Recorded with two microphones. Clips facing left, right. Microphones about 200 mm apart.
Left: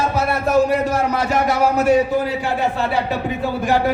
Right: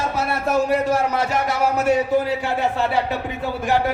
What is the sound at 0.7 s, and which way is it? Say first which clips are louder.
A man's voice: left 1 dB; 25° right (ahead or behind).